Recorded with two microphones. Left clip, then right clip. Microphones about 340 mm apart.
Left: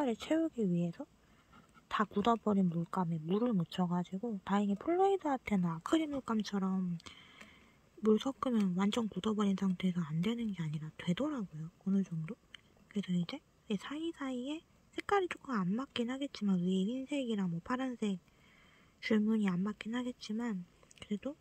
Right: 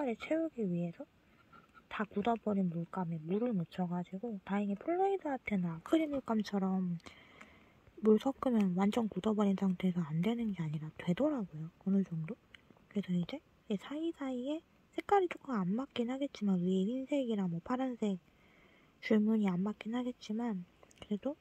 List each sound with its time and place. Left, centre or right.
0.1 s speech: left